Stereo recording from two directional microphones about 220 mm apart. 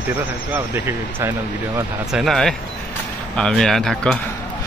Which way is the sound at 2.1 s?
Centre (ahead or behind).